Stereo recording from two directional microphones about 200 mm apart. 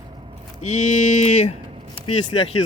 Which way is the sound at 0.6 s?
35° left (ahead or behind).